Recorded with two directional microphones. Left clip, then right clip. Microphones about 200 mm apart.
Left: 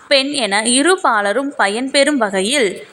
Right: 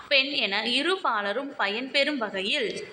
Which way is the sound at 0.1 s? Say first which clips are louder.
Left 9 dB; 50° left (ahead or behind).